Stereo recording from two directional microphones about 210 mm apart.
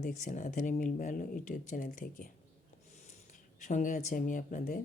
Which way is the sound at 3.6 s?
35° left (ahead or behind).